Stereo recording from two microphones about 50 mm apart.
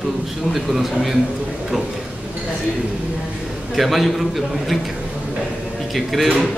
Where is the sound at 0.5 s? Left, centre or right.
Centre.